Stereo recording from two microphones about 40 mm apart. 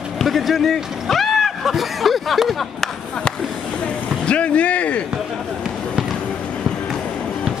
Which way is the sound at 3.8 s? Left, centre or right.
Left.